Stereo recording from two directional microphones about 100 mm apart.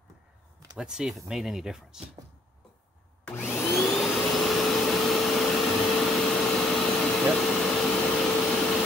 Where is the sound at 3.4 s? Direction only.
20° left (ahead or behind).